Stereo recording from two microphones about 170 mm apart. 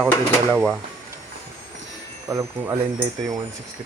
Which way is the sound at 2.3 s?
15° right (ahead or behind).